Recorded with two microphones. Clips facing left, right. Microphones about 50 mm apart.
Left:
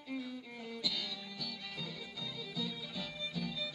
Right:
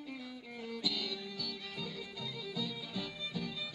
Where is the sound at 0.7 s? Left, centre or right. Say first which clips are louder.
Right 2 dB; right.